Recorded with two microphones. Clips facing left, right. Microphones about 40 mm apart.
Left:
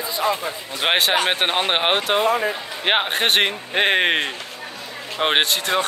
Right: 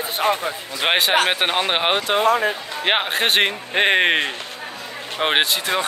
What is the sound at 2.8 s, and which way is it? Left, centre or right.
Speech, centre.